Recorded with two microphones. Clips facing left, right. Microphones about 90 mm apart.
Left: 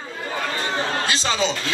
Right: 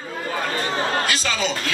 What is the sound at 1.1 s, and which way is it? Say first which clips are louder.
Speech: left 1 dB; 25° left (ahead or behind).